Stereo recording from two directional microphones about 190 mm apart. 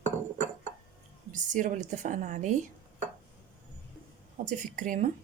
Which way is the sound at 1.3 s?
45° right (ahead or behind).